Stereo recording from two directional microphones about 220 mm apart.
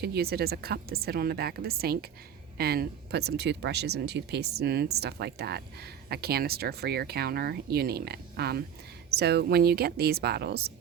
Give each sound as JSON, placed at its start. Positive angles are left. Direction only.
{"t": 0.0, "sound": "speech", "side_deg": -45}